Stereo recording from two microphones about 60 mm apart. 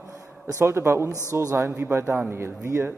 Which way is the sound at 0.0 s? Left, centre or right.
Right.